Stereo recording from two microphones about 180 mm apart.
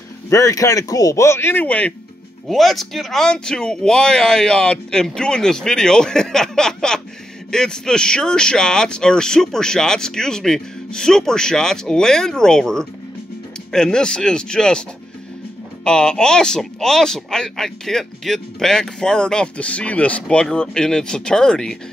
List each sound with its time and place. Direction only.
0.3 s speech: 20° left (ahead or behind)